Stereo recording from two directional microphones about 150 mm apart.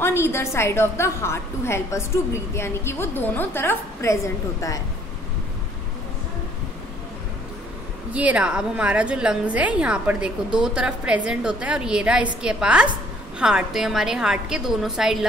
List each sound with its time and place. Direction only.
0.0 s a woman's voice: 15° left (ahead or behind)
8.1 s a woman's voice: 10° right (ahead or behind)